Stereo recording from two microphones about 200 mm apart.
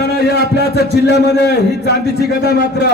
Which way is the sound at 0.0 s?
55° left (ahead or behind).